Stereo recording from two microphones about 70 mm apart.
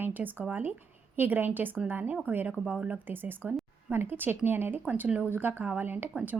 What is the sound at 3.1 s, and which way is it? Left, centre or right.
A woman's voice, right.